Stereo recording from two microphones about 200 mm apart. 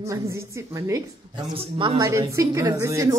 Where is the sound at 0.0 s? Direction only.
15° right (ahead or behind).